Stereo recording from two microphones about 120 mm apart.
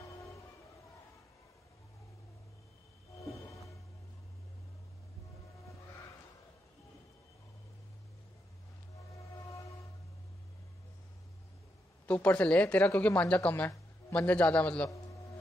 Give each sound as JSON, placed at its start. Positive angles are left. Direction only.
{"t": 3.2, "sound": "music", "side_deg": 25}
{"t": 12.1, "sound": "speech", "side_deg": 10}